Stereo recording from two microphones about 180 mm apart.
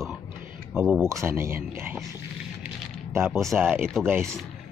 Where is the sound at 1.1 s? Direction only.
15° right (ahead or behind).